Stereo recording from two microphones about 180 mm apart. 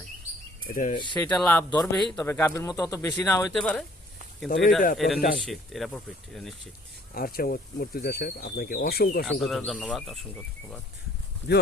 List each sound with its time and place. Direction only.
0.7 s speech: 45° left (ahead or behind)
0.9 s speech: 25° left (ahead or behind)
1.2 s speech: 5° left (ahead or behind)
2.2 s speech: 15° left (ahead or behind)
3.5 s speech: 5° left (ahead or behind)
4.9 s speech: centre (ahead or behind)
7.1 s speech: 55° left (ahead or behind)
9.2 s speech: centre (ahead or behind)
11.4 s speech: 35° left (ahead or behind)